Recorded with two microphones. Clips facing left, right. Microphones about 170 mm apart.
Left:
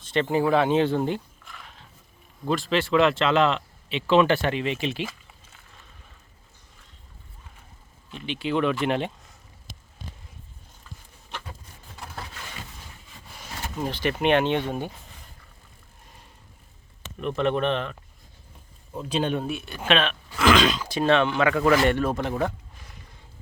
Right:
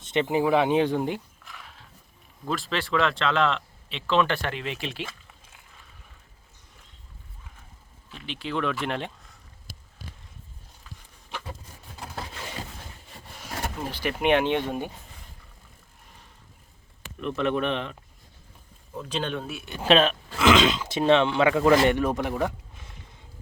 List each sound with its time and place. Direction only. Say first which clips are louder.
0.0 s speech: left 1 dB; 20° right (ahead or behind)
1.5 s a sound: even; centre (ahead or behind)
2.5 s speech: left 5 dB; centre (ahead or behind)
8.1 s speech: left 5 dB; centre (ahead or behind)
11.9 s a sound: right 2 dB; 25° right (ahead or behind)
13.9 s speech: left 1 dB; 10° right (ahead or behind)
17.2 s speech: left 2 dB; centre (ahead or behind)
18.9 s speech: left 4 dB; 15° left (ahead or behind)
19.8 s speech: right 4 dB; 35° right (ahead or behind)
20.4 s speech: even; 20° right (ahead or behind)